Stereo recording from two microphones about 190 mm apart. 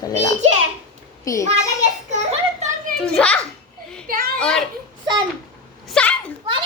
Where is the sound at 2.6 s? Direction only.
40° right (ahead or behind).